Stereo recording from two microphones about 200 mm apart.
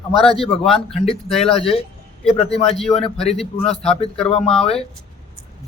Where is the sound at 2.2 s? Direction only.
30° left (ahead or behind).